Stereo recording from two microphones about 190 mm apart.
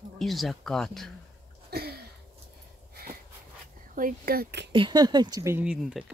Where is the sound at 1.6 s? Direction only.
55° right (ahead or behind).